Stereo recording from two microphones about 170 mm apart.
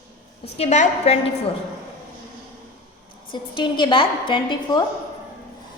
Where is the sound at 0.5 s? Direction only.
40° left (ahead or behind).